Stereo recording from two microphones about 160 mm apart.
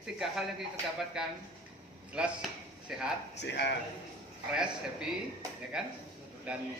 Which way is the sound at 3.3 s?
90° left.